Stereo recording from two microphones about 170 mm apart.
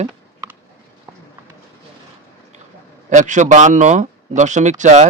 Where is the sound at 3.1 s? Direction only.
45° right (ahead or behind).